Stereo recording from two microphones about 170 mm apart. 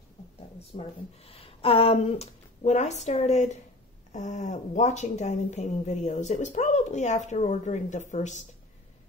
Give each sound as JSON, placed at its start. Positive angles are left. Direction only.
{"t": 0.6, "sound": "speech", "side_deg": 35}